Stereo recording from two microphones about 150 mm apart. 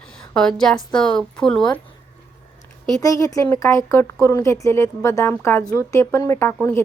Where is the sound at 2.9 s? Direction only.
20° left (ahead or behind).